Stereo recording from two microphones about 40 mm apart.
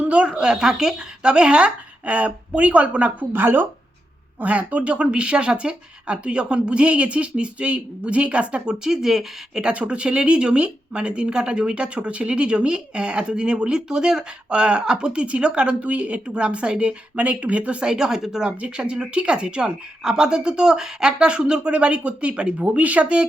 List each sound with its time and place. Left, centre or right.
0.1 s speech: right
2.0 s speech: right
3.3 s speech: right
4.4 s speech: right
8.8 s speech: centre
9.7 s speech: right
17.8 s speech: centre
18.6 s speech: right